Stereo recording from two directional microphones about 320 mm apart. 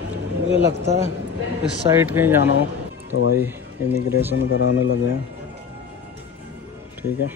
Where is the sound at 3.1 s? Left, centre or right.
Left.